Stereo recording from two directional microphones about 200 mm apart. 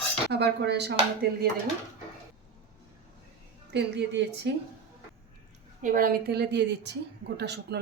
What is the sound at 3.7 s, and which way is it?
Speech, 60° right (ahead or behind).